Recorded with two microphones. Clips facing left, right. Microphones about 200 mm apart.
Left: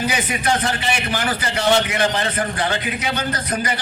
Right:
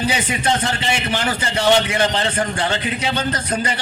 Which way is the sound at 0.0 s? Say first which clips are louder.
Right 1 dB; 30° right (ahead or behind).